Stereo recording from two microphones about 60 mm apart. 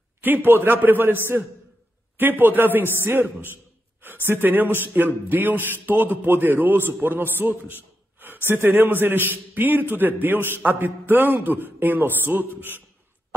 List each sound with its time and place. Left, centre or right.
0.5 s a man's voice: right
7.3 s a sound: right
8.5 s a man's voice: right